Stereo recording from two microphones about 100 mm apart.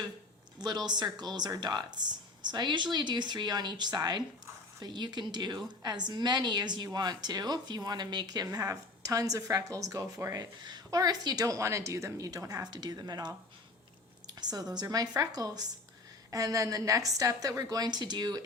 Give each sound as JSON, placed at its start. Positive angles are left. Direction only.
{"t": 0.9, "sound": "a woman's voice", "side_deg": -45}
{"t": 8.4, "sound": "a woman's voice", "side_deg": -30}